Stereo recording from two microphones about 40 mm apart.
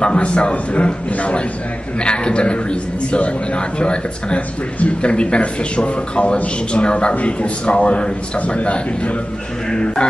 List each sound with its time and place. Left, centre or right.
0.0 s a man's voice: left
9.7 s a man's voice: left